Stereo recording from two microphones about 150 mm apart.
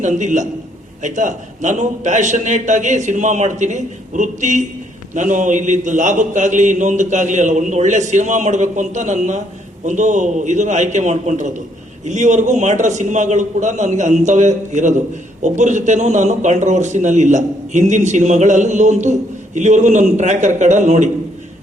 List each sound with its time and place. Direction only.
0.0 s a man's voice: 55° right (ahead or behind)